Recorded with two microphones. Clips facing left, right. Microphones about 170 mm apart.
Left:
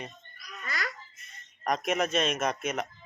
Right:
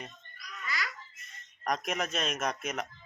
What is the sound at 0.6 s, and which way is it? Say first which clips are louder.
Babbling: left 1 dB; 45° left (ahead or behind).